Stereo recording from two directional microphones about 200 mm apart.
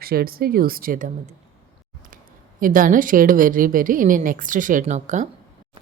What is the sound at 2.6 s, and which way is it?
Speech, 45° right (ahead or behind).